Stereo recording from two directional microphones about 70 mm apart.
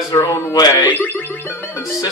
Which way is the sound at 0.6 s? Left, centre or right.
Left.